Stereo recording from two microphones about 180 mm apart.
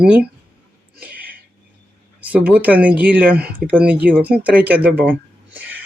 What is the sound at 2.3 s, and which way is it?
Speech, 10° right (ahead or behind).